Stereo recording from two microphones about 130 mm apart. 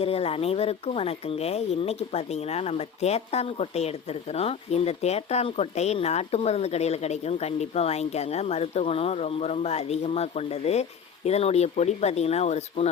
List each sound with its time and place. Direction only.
0.0 s speech: 50° left (ahead or behind)